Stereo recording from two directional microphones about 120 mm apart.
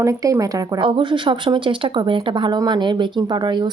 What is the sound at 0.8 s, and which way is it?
Speech, 45° right (ahead or behind).